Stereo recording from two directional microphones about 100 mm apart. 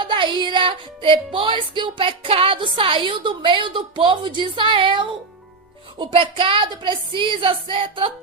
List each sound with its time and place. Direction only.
0.0 s music: 50° right (ahead or behind)